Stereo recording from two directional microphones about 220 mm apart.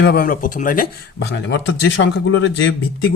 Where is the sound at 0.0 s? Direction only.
45° left (ahead or behind).